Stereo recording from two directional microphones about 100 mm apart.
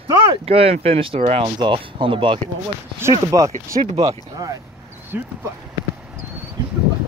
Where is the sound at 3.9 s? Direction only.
90° right.